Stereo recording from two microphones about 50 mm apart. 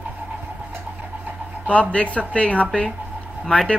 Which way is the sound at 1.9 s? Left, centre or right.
Left.